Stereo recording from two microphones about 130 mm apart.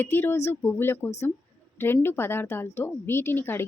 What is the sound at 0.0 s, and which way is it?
A woman's voice, 15° left (ahead or behind).